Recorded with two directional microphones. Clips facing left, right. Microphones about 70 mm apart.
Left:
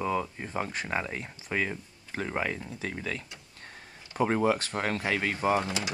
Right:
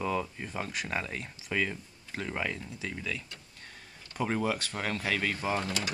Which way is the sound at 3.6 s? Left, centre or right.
Left.